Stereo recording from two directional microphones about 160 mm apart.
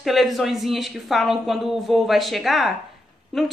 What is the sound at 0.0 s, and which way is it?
A woman's voice, centre (ahead or behind).